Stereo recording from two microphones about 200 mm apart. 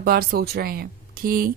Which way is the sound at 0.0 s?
50° right (ahead or behind).